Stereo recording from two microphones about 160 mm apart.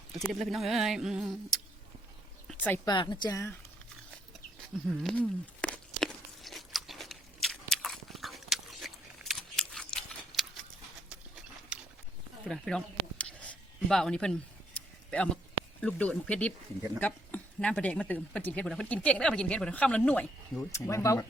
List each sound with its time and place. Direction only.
0.3 s speech: centre (ahead or behind)
2.5 s speech: 10° left (ahead or behind)
2.8 s a woman's voice: 30° left (ahead or behind)
4.9 s walk: 5° left (ahead or behind)
7.4 s biting: 5° left (ahead or behind)
11.7 s a sound: 5° right (ahead or behind)
12.5 s a sound: 5° left (ahead or behind)
15.8 s speech: 10° left (ahead or behind)